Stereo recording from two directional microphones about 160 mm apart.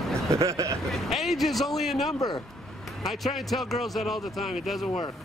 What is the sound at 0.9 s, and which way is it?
Speech, centre (ahead or behind).